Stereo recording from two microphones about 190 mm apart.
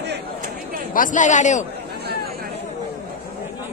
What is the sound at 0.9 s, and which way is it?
Speech, 45° left (ahead or behind).